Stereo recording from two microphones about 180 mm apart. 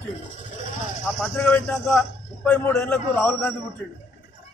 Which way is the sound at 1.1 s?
10° left (ahead or behind).